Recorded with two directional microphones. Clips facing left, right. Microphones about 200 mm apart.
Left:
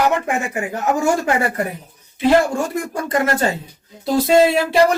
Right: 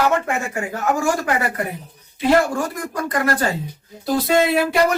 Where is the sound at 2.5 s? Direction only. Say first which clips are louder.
Left 2 dB; 25° left (ahead or behind).